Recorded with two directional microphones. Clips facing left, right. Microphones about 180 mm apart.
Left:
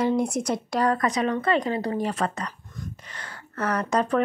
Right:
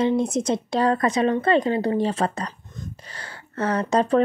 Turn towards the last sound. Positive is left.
turn(degrees=-30)  # may be behind; listen again after turning